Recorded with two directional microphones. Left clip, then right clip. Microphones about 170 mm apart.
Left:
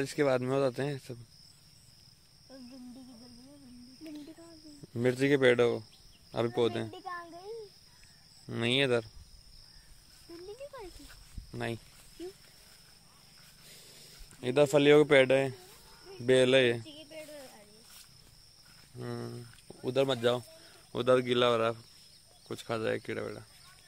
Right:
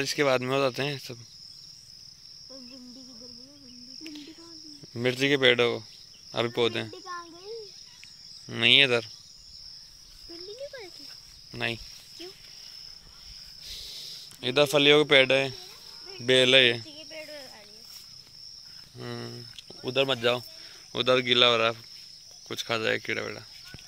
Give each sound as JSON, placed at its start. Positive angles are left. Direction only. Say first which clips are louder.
{"t": 0.0, "sound": "speech", "louder": "right 4 dB", "side_deg": 5}
{"t": 4.0, "sound": "cricket", "louder": "right 2 dB", "side_deg": 15}
{"t": 4.9, "sound": "speech", "louder": "right 3 dB", "side_deg": 15}
{"t": 8.5, "sound": "speech", "louder": "right 9 dB", "side_deg": 10}
{"t": 11.5, "sound": "speech", "louder": "right 6 dB", "side_deg": 10}
{"t": 14.4, "sound": "speech", "louder": "right 3 dB", "side_deg": 10}
{"t": 16.9, "sound": "cricket", "louder": "right 5 dB", "side_deg": 20}
{"t": 18.9, "sound": "speech", "louder": "right 2 dB", "side_deg": 5}
{"t": 19.8, "sound": "speech", "louder": "right 3 dB", "side_deg": 20}